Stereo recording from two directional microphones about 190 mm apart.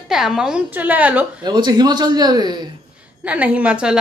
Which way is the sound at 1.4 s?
20° right (ahead or behind).